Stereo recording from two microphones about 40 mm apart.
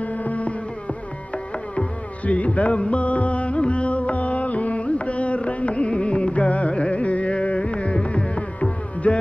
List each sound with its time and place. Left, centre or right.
0.0 s music: left
2.2 s music: left
6.7 s carnatic music: left